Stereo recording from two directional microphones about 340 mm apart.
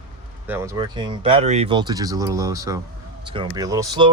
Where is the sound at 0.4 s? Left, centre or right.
Centre.